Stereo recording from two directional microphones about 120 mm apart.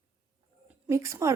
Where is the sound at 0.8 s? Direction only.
25° right (ahead or behind).